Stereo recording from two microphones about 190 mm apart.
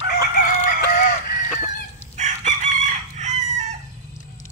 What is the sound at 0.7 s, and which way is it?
Fowl, 50° left (ahead or behind).